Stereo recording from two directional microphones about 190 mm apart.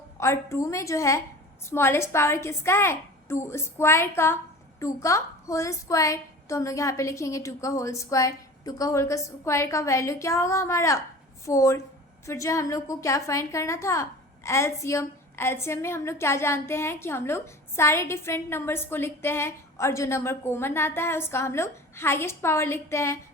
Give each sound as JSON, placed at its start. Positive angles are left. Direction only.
{"t": 0.2, "sound": "a woman's voice", "side_deg": 15}